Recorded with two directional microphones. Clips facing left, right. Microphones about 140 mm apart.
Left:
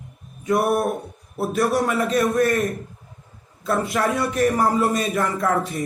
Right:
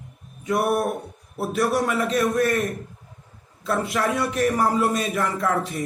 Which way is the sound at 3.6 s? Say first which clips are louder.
Left 2 dB; 40° left (ahead or behind).